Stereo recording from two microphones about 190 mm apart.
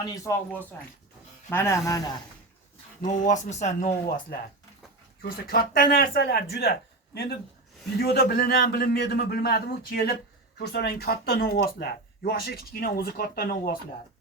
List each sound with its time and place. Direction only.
0.0 s speech: 20° left (ahead or behind)
3.0 s speech: 40° left (ahead or behind)
5.2 s a man's voice: 50° left (ahead or behind)